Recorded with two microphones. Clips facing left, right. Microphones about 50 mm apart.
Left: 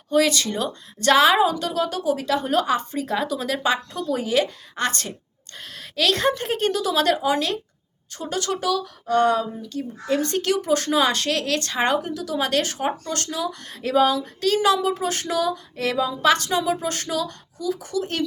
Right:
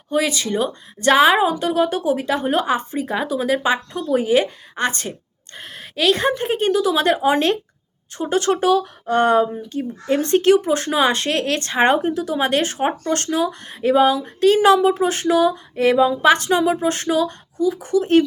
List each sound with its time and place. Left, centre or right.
0.1 s speech: centre